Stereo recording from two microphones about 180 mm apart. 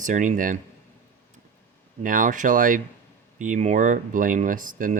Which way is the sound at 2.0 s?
50° right (ahead or behind).